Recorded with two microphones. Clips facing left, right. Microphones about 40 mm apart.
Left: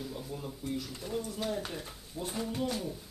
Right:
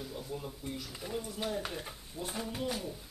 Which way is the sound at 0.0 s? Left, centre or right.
Centre.